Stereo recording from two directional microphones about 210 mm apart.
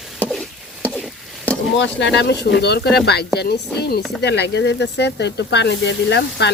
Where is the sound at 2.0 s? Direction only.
55° left (ahead or behind).